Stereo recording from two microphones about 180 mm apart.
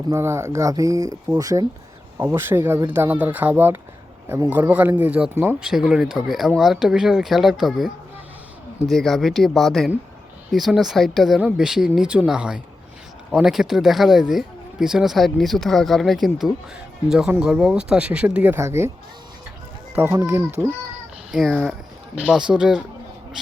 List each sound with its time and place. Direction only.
0.1 s speech: 15° right (ahead or behind)
8.9 s speech: centre (ahead or behind); by 18.9 s 15° right (ahead or behind)
20.0 s speech: 15° right (ahead or behind)
21.3 s speech: centre (ahead or behind)